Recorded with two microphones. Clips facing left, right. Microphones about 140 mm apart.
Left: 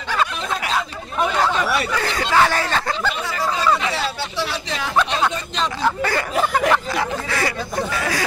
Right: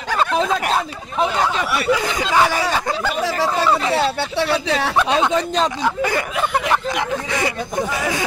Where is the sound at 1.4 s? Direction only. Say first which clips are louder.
Right 1 dB; 15° right (ahead or behind).